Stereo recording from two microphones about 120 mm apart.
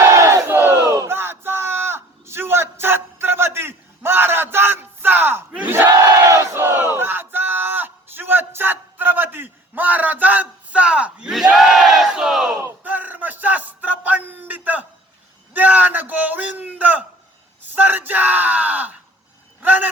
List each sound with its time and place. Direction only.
0.0 s battle cry: 25° right (ahead or behind)
5.5 s crowd: 15° right (ahead or behind)
6.0 s battle cry: 25° right (ahead or behind); by 12.5 s 5° right (ahead or behind)
12.5 s a sound: 20° right (ahead or behind)